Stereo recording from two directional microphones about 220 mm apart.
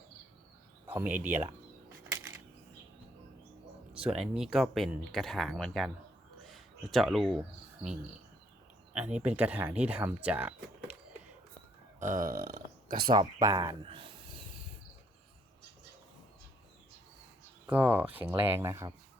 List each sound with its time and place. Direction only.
0.9 s speech: 10° right (ahead or behind)
3.9 s speech: 5° right (ahead or behind)
6.4 s a sound: centre (ahead or behind)
9.0 s speech: 5° right (ahead or behind)
11.9 s speech: 35° right (ahead or behind)
12.5 s a sound: 40° right (ahead or behind)
13.1 s speech: 15° right (ahead or behind)
17.7 s speech: 10° right (ahead or behind)